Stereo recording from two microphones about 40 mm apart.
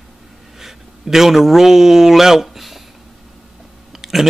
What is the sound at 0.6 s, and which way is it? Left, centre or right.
A man's voice, centre.